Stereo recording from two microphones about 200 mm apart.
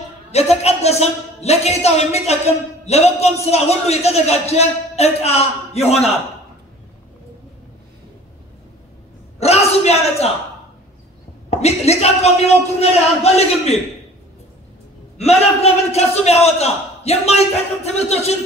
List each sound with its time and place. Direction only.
0.3 s a man's voice: 30° left (ahead or behind)
9.4 s a sound: 30° left (ahead or behind)
11.5 s a man's voice: 30° left (ahead or behind)
15.1 s a man's voice: 30° left (ahead or behind)